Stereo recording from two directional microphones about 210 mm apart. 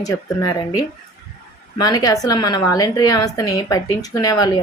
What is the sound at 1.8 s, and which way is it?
A woman's voice, 15° left (ahead or behind).